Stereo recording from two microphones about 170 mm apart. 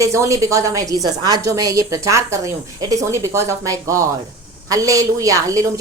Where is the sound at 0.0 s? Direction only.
20° right (ahead or behind).